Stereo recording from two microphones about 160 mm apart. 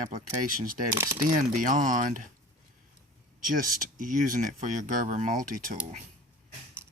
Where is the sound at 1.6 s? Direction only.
55° right (ahead or behind).